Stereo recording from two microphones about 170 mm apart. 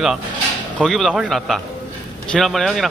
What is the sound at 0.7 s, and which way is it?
Speech, centre (ahead or behind).